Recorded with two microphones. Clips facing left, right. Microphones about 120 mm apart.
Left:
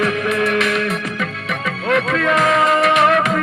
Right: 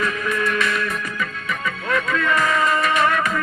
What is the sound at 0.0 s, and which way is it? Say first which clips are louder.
Music: left 5 dB; 80° left.